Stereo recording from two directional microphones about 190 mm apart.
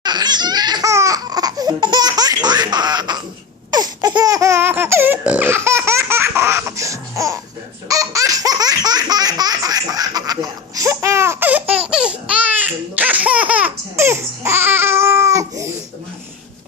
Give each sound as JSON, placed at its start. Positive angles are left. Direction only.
{"t": 0.0, "sound": "laughter", "side_deg": -20}
{"t": 3.7, "sound": "baby laughter", "side_deg": -20}
{"t": 7.9, "sound": "laughter", "side_deg": -15}